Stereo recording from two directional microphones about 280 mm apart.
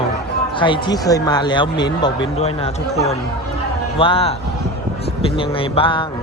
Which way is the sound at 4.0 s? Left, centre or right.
Centre.